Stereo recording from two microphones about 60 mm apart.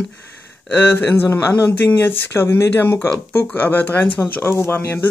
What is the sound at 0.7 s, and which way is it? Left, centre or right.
Speech, left.